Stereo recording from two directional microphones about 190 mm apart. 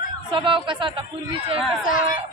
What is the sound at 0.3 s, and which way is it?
Speech, 25° right (ahead or behind).